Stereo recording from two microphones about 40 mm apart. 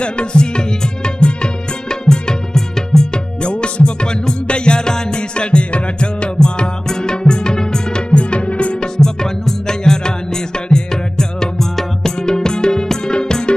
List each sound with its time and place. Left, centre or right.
0.0 s music: left
3.4 s music: left
8.1 s music: left
8.9 s music: centre